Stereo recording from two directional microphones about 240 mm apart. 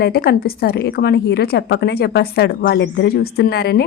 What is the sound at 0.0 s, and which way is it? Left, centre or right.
A woman's voice, left.